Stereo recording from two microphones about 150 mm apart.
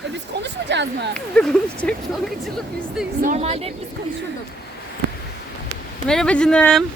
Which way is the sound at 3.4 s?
40° right (ahead or behind).